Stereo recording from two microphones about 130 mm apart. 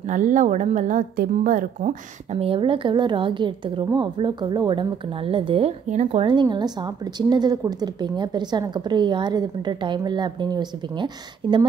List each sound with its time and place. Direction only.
0.1 s a woman's voice: 75° right (ahead or behind)
2.3 s a woman's voice: 45° right (ahead or behind)
6.2 s a woman's voice: 35° right (ahead or behind)